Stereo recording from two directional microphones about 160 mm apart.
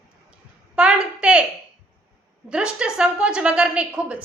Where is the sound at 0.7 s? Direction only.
5° right (ahead or behind).